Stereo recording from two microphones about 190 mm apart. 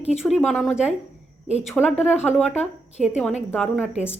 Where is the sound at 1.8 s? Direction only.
5° left (ahead or behind).